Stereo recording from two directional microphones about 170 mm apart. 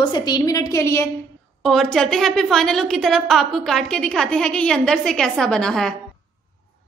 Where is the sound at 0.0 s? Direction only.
25° left (ahead or behind).